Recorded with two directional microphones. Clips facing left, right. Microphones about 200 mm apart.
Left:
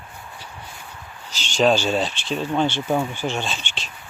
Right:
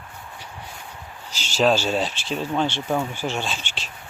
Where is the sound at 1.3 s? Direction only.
5° right (ahead or behind).